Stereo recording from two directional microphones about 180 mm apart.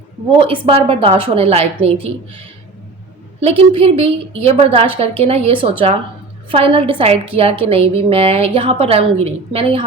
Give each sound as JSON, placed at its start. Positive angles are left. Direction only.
{"t": 0.4, "sound": "a woman's voice", "side_deg": -30}
{"t": 3.4, "sound": "a woman's voice", "side_deg": -35}